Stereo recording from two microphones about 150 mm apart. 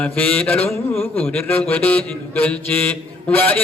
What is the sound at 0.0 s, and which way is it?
Mantra, 10° left (ahead or behind).